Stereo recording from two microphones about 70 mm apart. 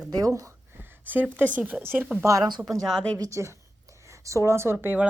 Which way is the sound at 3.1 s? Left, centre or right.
Right.